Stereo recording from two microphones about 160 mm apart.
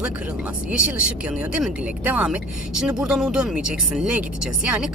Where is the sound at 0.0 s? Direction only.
5° right (ahead or behind).